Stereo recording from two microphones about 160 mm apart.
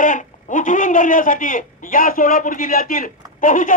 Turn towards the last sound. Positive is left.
turn(degrees=55)  # may be behind; listen again after turning